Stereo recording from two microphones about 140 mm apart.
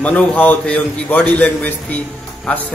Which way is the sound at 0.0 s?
10° left (ahead or behind).